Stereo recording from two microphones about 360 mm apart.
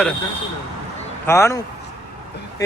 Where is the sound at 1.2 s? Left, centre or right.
Centre.